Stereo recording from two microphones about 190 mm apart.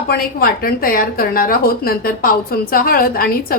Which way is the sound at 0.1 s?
50° left (ahead or behind).